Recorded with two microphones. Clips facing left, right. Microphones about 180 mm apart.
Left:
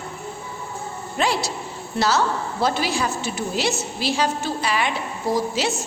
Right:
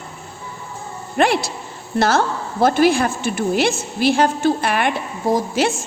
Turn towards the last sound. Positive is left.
turn(degrees=-50)  # may be behind; listen again after turning